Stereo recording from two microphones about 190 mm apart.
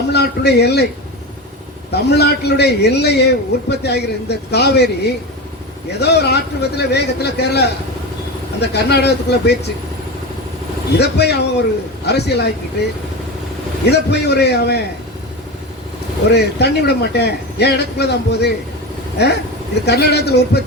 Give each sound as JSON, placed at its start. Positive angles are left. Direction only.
{"t": 0.1, "sound": "a man's voice", "side_deg": 60}
{"t": 1.9, "sound": "a man's voice", "side_deg": 60}
{"t": 10.9, "sound": "a man's voice", "side_deg": 60}
{"t": 13.8, "sound": "a man's voice", "side_deg": 60}
{"t": 16.3, "sound": "a man's voice", "side_deg": 60}